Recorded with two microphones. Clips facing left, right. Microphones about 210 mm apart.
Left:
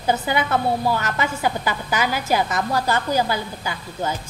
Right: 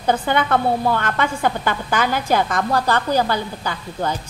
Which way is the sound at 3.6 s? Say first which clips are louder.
Right 2 dB; 45° right (ahead or behind).